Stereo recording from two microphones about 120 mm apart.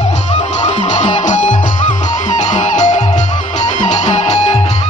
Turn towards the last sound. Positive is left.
turn(degrees=70)  # may be behind; listen again after turning